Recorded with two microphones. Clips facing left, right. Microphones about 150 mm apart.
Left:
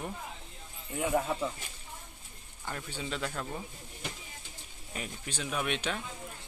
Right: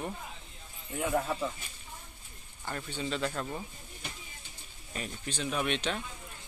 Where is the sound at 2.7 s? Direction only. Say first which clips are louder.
Right 2 dB; 10° left (ahead or behind).